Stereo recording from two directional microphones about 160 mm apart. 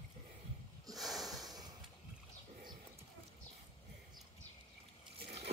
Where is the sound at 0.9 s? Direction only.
Centre (ahead or behind).